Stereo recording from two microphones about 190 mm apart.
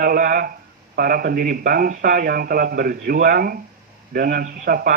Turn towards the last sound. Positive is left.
turn(degrees=-50)  # may be behind; listen again after turning